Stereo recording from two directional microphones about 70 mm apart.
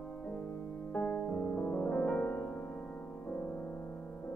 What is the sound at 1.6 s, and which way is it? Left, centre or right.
Music, centre.